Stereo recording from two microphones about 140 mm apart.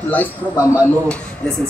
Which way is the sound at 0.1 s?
15° left (ahead or behind).